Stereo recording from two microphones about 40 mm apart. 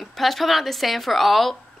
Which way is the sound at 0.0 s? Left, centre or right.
Centre.